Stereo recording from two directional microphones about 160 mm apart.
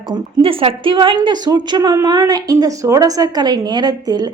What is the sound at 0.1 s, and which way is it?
A woman's voice, 35° right (ahead or behind).